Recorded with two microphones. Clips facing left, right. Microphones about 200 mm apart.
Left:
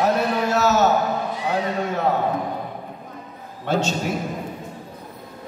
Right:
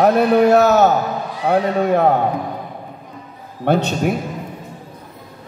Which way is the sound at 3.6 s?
60° right (ahead or behind).